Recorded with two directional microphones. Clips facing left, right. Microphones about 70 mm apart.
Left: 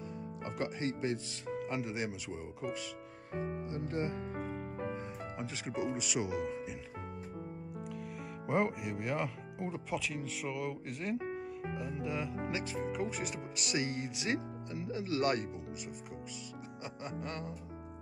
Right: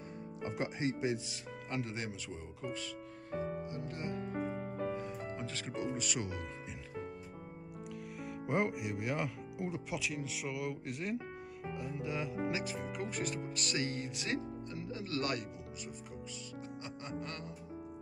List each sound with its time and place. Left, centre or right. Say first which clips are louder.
0.4 s speech: right 1 dB; centre
1.6 s speech: left 2 dB; centre
3.3 s speech: left 1 dB; left
4.7 s music: right 2 dB; left
5.3 s speech: left 1 dB; centre
8.2 s speech: left 1 dB; centre
17.0 s speech: left 3 dB; centre